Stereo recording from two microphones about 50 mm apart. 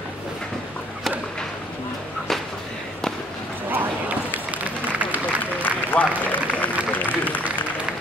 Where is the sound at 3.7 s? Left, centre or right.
Right.